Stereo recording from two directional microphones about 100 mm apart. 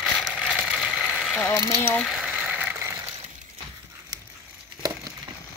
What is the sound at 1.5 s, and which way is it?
Speech, 35° left (ahead or behind).